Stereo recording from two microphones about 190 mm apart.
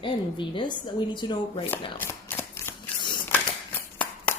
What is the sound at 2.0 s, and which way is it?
Shuffling cards, 10° left (ahead or behind).